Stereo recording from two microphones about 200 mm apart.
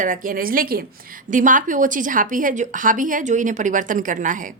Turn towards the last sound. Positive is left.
turn(degrees=-40)  # may be behind; listen again after turning